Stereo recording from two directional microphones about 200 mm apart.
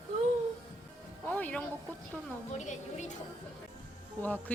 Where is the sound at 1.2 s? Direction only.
10° left (ahead or behind).